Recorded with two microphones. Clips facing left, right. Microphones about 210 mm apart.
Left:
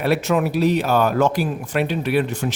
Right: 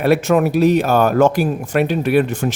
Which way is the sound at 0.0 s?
50° right (ahead or behind).